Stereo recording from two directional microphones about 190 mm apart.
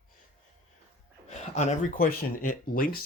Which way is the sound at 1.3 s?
35° left (ahead or behind).